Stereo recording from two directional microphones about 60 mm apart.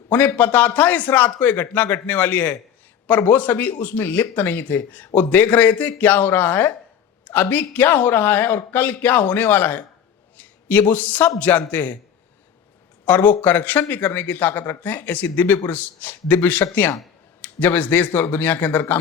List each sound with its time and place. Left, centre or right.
0.3 s a man's voice: left
13.2 s speech: left